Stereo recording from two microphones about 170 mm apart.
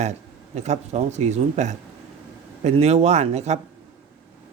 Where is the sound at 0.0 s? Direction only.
40° right (ahead or behind).